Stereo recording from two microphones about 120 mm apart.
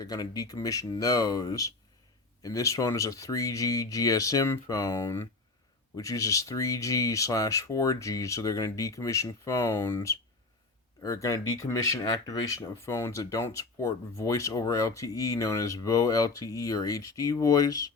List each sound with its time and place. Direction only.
0.0 s speech: 30° left (ahead or behind)